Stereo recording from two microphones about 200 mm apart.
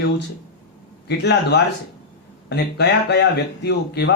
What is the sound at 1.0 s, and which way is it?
Speech, 55° left (ahead or behind).